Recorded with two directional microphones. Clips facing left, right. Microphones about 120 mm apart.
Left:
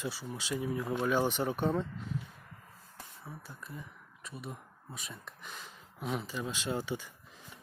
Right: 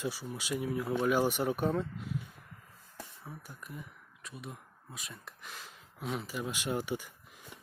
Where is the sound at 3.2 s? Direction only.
15° right (ahead or behind).